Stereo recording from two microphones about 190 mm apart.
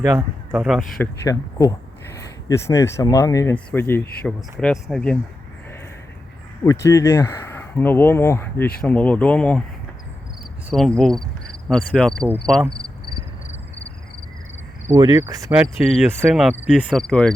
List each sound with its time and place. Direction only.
0.0 s speech: 15° right (ahead or behind)
1.2 s speech: 15° left (ahead or behind)
4.2 s cricket: 5° left (ahead or behind)
6.7 s speech: 15° left (ahead or behind)
10.7 s speech: centre (ahead or behind)
12.5 s cricket: centre (ahead or behind)
14.8 s cricket: 20° right (ahead or behind)
15.5 s cricket: centre (ahead or behind)